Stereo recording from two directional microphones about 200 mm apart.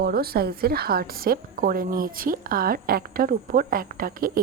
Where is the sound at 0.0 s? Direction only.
50° right (ahead or behind).